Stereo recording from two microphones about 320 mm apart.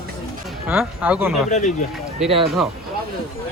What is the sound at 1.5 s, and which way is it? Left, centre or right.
Speech, left.